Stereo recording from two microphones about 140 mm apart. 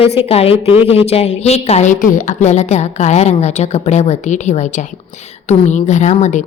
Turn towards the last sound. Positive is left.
turn(degrees=55)  # may be behind; listen again after turning